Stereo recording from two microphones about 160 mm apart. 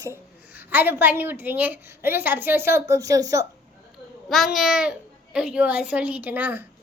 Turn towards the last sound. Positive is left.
turn(degrees=-10)  # may be behind; listen again after turning